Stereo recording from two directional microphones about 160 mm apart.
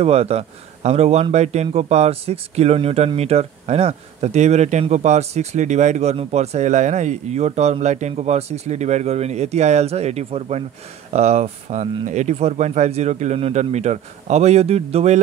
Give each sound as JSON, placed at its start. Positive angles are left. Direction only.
{"t": 0.0, "sound": "a man's voice", "side_deg": -40}